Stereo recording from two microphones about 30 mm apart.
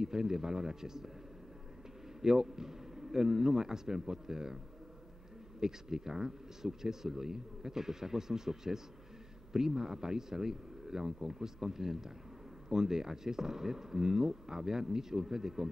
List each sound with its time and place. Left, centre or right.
0.0 s speech: centre
2.2 s speech: centre
5.6 s speech: centre